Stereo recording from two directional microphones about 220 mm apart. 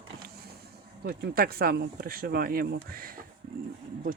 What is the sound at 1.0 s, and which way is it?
Speech, 45° right (ahead or behind).